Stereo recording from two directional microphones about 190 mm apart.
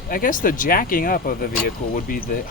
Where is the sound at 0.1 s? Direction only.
45° left (ahead or behind).